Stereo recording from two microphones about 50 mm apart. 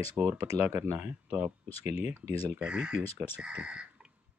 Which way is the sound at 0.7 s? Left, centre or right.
Right.